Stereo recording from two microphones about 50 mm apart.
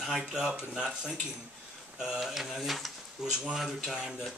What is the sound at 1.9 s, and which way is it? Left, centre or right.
Speech, centre.